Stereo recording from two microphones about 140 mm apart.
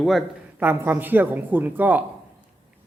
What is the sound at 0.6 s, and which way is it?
A woman's voice, 15° right (ahead or behind).